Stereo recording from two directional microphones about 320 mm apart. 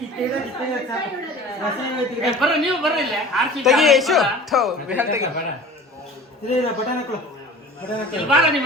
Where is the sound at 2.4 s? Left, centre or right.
Centre.